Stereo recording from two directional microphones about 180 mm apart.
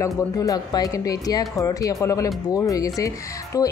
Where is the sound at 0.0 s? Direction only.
20° left (ahead or behind).